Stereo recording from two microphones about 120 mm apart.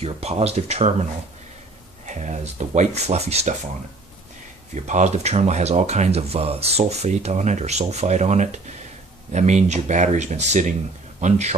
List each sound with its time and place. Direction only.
0.0 s speech: 60° right (ahead or behind)
2.0 s speech: 75° right (ahead or behind)
4.7 s speech: 75° right (ahead or behind)
11.1 s speech: 80° right